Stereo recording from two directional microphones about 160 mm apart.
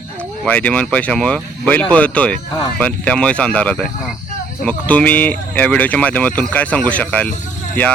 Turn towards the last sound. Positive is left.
turn(degrees=10)  # may be behind; listen again after turning